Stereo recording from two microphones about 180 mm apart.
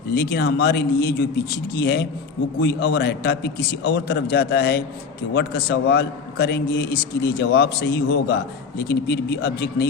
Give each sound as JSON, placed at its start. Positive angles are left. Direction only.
{"t": 0.1, "sound": "a man's voice", "side_deg": 60}